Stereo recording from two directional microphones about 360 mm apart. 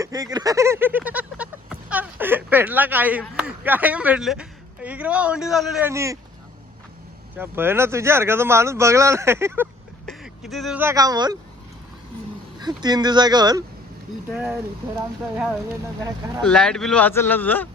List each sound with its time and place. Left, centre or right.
0.0 s speech: centre
7.3 s speech: centre
12.5 s speech: centre
16.4 s speech: centre